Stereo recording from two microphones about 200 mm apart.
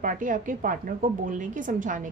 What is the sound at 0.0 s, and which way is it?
A woman's voice, 40° right (ahead or behind).